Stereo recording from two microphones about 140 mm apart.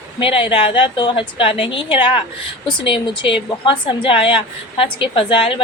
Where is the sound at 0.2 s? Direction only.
40° left (ahead or behind).